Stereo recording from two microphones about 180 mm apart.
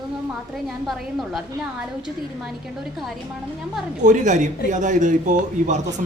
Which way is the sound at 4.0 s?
45° right (ahead or behind).